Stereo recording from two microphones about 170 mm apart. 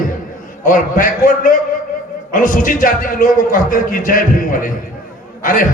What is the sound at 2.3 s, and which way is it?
A man's voice, 50° left (ahead or behind).